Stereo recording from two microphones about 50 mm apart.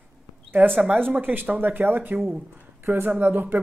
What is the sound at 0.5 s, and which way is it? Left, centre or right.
Speech, right.